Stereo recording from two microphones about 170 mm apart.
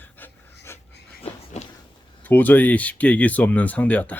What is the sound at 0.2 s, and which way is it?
Dog, 10° left (ahead or behind).